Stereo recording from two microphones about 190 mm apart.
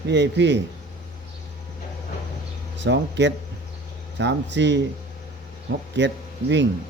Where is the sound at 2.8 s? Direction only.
65° right (ahead or behind).